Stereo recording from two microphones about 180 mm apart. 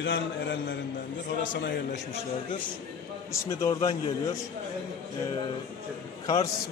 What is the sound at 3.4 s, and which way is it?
Speech, 20° left (ahead or behind).